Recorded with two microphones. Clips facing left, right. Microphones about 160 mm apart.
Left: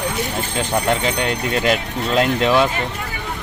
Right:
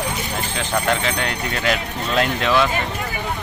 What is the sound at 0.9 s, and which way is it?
Speech, 20° left (ahead or behind).